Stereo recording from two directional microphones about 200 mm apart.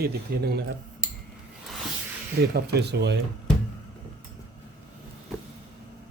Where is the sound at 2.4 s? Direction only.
55° right (ahead or behind).